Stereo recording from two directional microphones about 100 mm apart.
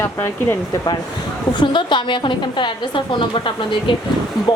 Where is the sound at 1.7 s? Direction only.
50° left (ahead or behind).